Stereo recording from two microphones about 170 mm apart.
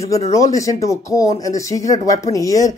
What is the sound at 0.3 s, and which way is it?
Speech, 20° left (ahead or behind).